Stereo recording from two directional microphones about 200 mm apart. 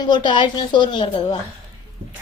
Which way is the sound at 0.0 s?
20° left (ahead or behind).